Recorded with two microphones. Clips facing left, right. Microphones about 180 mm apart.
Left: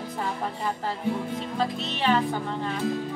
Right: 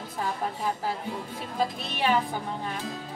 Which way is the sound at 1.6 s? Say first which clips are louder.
Right 1 dB; 10° right (ahead or behind).